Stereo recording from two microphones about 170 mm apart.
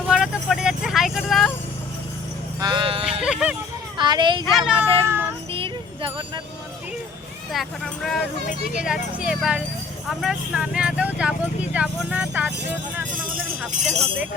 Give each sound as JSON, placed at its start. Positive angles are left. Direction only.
{"t": 0.1, "sound": "vehicle", "side_deg": -5}
{"t": 2.6, "sound": "music", "side_deg": -25}
{"t": 3.2, "sound": "music", "side_deg": -5}
{"t": 3.9, "sound": "a sound", "side_deg": -25}
{"t": 4.5, "sound": "cat", "side_deg": -5}
{"t": 5.5, "sound": "music", "side_deg": -30}
{"t": 7.5, "sound": "speech", "side_deg": 0}